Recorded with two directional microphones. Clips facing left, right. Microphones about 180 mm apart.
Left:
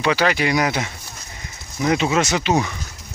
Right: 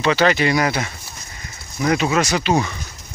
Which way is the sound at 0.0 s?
10° left (ahead or behind).